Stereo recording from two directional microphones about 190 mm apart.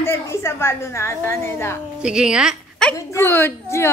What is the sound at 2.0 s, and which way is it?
A woman's voice, 5° right (ahead or behind).